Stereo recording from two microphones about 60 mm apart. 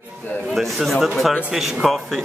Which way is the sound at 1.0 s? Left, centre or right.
Centre.